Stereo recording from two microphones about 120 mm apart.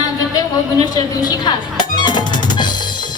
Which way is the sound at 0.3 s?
30° left (ahead or behind).